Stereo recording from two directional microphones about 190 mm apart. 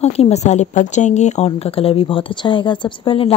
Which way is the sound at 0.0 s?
35° left (ahead or behind).